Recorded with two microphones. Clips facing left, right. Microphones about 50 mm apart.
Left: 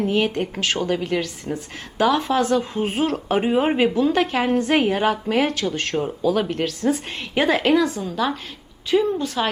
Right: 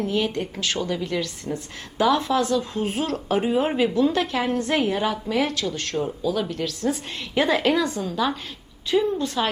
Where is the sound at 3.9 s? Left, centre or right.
Centre.